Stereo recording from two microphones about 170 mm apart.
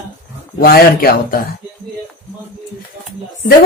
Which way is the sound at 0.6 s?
60° left (ahead or behind).